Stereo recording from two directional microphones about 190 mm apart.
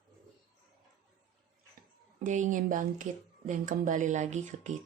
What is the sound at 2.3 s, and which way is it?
Speech, 40° right (ahead or behind).